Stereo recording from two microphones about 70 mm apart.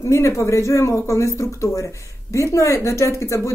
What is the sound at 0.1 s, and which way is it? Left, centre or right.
Speech, left.